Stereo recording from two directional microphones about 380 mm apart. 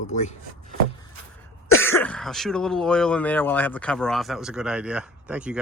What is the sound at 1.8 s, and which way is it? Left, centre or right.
Speech, centre.